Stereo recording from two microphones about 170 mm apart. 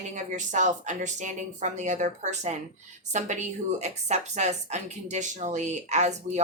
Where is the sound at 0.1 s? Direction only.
45° right (ahead or behind).